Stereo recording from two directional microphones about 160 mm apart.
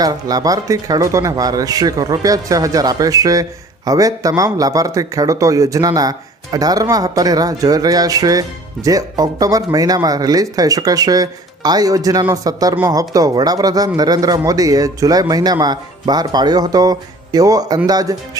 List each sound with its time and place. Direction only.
0.0 s a man's voice: 25° right (ahead or behind)